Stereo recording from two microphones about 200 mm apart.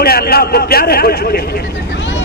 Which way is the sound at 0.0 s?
50° left (ahead or behind).